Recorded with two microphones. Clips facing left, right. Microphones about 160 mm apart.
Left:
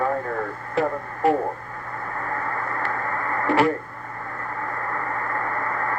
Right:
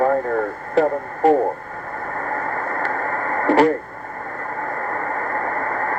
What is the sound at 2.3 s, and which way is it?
Radio, 40° right (ahead or behind).